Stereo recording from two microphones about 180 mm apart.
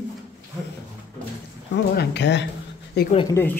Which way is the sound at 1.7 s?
75° left (ahead or behind).